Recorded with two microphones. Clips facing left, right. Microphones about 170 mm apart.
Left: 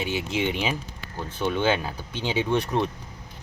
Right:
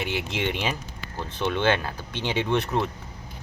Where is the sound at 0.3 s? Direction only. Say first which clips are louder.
Left 3 dB; 10° left (ahead or behind).